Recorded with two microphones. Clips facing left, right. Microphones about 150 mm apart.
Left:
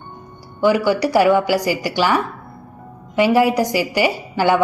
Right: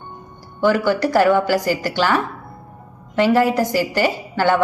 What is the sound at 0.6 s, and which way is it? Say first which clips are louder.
A woman's voice: left 1 dB; 15° left (ahead or behind).